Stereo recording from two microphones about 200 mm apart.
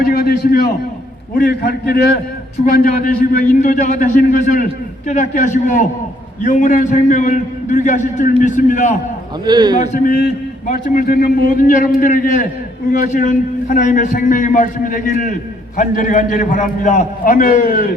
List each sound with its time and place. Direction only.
0.0 s a sound: 50° left (ahead or behind)
1.4 s a man's voice: 45° left (ahead or behind)
9.5 s a man's voice: 20° right (ahead or behind)
9.9 s a man's voice: 45° left (ahead or behind)